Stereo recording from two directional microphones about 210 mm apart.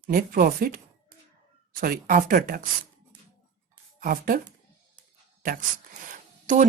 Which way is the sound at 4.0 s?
45° right (ahead or behind).